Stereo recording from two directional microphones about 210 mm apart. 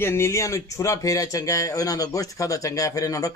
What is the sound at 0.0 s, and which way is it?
A man's voice, 10° left (ahead or behind).